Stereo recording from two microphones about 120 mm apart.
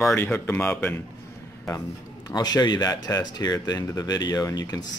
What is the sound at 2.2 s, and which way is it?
Speech, 30° left (ahead or behind).